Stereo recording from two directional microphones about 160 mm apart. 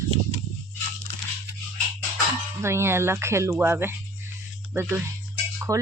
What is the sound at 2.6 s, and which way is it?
Speech, 15° right (ahead or behind).